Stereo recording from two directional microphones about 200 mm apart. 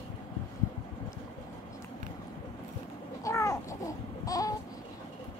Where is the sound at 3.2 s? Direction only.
15° left (ahead or behind).